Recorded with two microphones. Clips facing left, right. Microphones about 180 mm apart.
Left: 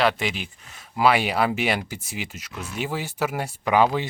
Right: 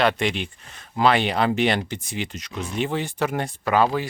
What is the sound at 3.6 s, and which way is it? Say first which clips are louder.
Speech: left 1 dB; 15° left (ahead or behind).